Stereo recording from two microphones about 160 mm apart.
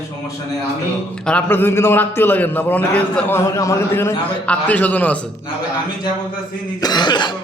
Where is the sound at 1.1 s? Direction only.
5° left (ahead or behind).